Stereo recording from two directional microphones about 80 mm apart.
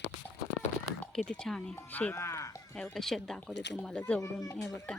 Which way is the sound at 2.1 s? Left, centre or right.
Left.